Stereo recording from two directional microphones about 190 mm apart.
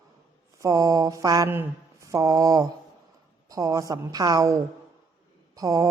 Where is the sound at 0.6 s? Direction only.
20° right (ahead or behind).